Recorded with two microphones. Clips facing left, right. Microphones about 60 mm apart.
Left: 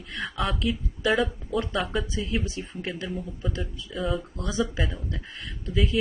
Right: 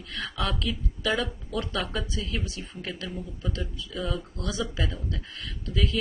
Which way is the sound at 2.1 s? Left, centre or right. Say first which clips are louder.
Left 4 dB; left.